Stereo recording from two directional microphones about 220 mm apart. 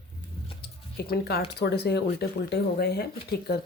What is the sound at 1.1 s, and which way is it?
Speech, 45° left (ahead or behind).